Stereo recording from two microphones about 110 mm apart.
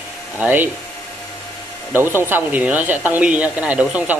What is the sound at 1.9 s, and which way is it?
Speech, 20° right (ahead or behind).